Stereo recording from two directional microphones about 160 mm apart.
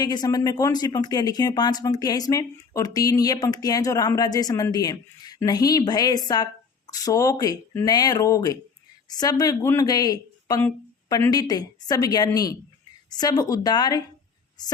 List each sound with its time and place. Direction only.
0.0 s speech: 25° left (ahead or behind)